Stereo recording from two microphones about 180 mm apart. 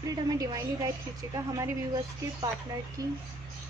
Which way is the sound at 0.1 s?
20° right (ahead or behind).